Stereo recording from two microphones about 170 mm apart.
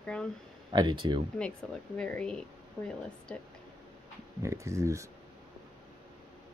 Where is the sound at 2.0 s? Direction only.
5° left (ahead or behind).